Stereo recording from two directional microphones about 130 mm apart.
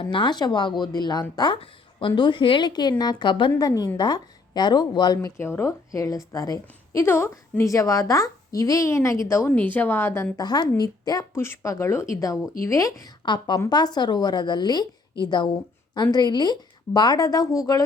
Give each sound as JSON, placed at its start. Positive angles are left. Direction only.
{"t": 0.0, "sound": "a woman's voice", "side_deg": 40}
{"t": 10.3, "sound": "speech", "side_deg": 30}
{"t": 13.2, "sound": "a woman's voice", "side_deg": 35}